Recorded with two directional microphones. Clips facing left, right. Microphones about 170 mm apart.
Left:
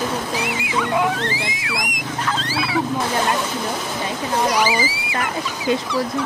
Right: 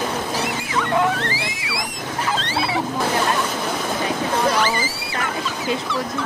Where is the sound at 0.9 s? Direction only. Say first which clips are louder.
Right 2 dB; 15° left (ahead or behind).